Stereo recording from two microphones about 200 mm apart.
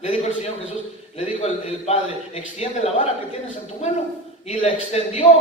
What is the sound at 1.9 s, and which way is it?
A man's voice, 30° left (ahead or behind).